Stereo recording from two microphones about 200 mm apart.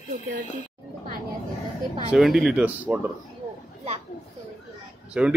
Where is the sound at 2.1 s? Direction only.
Centre (ahead or behind).